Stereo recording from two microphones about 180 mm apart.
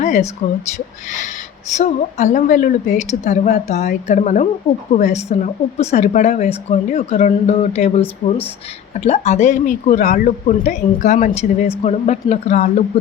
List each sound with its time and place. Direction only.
0.0 s a sound: 40° left (ahead or behind)
1.7 s a woman's voice: 40° left (ahead or behind)
9.0 s speech: 35° left (ahead or behind)